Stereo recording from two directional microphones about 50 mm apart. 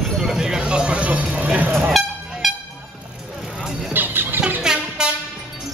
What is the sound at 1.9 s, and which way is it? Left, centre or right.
Vehicle, centre.